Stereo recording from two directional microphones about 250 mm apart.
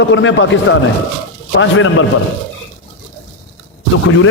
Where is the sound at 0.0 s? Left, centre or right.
Left.